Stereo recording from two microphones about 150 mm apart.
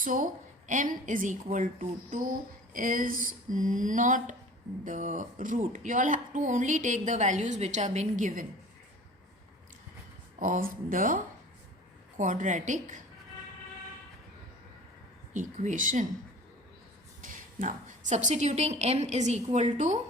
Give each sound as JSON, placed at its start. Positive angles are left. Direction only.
{"t": 0.0, "sound": "speech", "side_deg": -60}
{"t": 10.4, "sound": "speech", "side_deg": -65}
{"t": 15.3, "sound": "speech", "side_deg": -55}
{"t": 17.2, "sound": "a woman's voice", "side_deg": -60}